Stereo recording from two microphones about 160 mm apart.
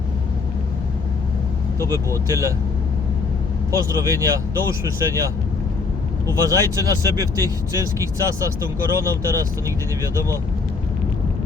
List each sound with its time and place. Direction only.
2.2 s speech: 20° right (ahead or behind)
3.7 s speech: 20° right (ahead or behind)